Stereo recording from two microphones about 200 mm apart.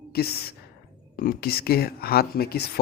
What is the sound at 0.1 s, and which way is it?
Speech, 50° left (ahead or behind).